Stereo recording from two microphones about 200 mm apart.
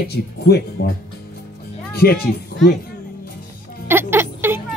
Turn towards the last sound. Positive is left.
turn(degrees=-10)  # may be behind; listen again after turning